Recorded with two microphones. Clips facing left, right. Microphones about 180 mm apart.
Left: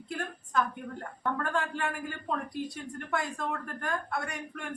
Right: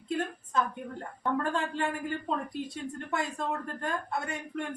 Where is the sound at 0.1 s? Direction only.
25° right (ahead or behind).